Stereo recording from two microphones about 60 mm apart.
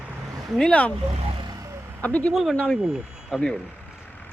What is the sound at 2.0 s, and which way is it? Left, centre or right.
Speech, left.